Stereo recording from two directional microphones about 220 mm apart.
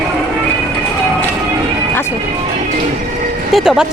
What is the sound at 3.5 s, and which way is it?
Speech, centre (ahead or behind).